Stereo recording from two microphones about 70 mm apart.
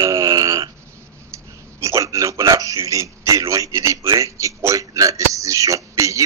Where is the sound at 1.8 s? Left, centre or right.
Right.